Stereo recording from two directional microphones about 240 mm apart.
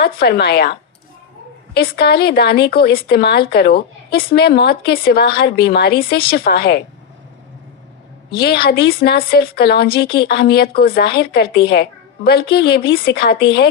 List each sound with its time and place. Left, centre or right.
0.2 s speech: left
8.4 s a woman's voice: left